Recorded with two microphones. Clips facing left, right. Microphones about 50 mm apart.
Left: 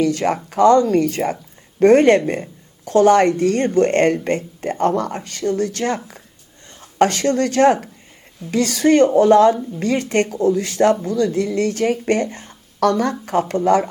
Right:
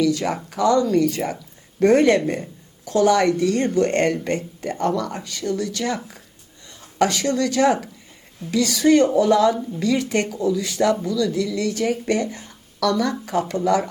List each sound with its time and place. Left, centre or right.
0.0 s speech: left
7.0 s speech: left